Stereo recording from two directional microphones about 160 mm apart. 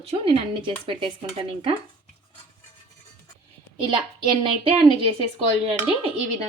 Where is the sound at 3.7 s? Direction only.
30° right (ahead or behind).